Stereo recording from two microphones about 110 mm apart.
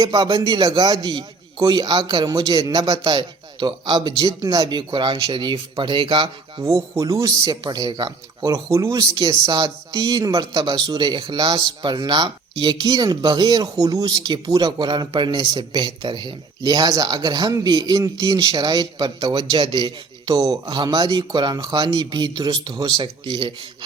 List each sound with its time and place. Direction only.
0.0 s speech: 35° right (ahead or behind)
4.9 s speech: 45° right (ahead or behind)
6.6 s speech: 30° right (ahead or behind)
8.5 s speech: 30° right (ahead or behind)
18.0 s speech: 30° right (ahead or behind)
20.7 s speech: 40° right (ahead or behind)